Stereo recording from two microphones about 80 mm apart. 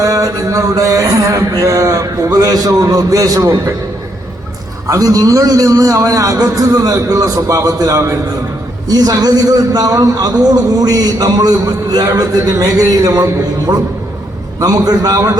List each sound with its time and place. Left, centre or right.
0.0 s a man's voice: right
4.9 s a man's voice: right
8.9 s a man's voice: right